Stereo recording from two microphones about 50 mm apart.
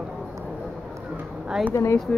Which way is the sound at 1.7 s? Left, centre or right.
Left.